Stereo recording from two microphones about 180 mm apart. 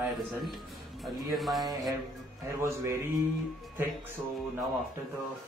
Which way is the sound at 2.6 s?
15° right (ahead or behind).